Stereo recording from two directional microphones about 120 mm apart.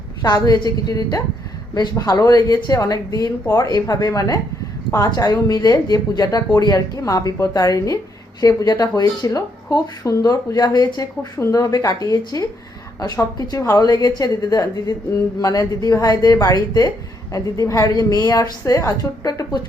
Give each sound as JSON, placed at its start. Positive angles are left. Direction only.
{"t": 0.2, "sound": "speech", "side_deg": 35}